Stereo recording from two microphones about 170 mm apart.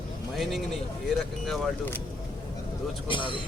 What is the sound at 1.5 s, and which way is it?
Speech, 5° left (ahead or behind).